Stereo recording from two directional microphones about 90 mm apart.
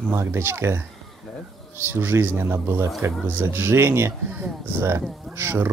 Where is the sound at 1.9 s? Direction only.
25° right (ahead or behind).